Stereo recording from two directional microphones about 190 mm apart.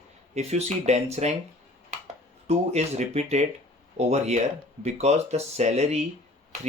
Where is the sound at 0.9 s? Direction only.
35° right (ahead or behind).